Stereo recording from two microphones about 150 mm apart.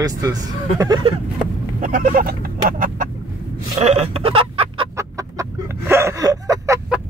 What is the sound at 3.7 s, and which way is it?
Chicken, 45° right (ahead or behind).